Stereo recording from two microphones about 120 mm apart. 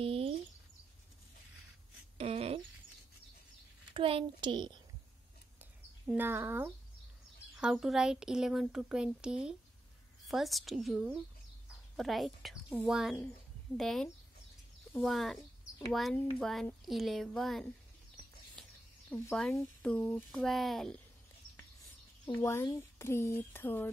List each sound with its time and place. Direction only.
0.0 s a sound: 50° right (ahead or behind)
2.1 s a sound: 55° right (ahead or behind)
3.9 s a child's voice: 45° right (ahead or behind)
6.0 s speech: 15° right (ahead or behind)
7.6 s speech: centre (ahead or behind)
15.0 s speech: centre (ahead or behind)
18.6 s a sound: 5° left (ahead or behind)
19.1 s speech: 10° left (ahead or behind)
22.3 s speech: 20° left (ahead or behind)